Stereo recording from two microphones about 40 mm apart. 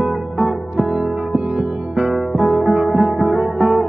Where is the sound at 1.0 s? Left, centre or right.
Centre.